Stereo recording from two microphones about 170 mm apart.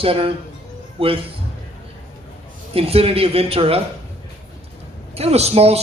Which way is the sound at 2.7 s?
35° right (ahead or behind).